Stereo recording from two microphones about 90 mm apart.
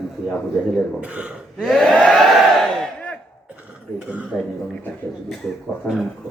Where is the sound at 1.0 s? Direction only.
15° right (ahead or behind).